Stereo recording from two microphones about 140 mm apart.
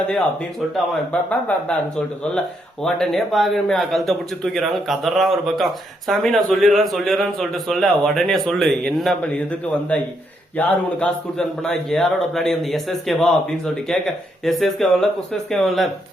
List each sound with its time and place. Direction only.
1.3 s speech: 10° left (ahead or behind)
2.8 s speech: centre (ahead or behind)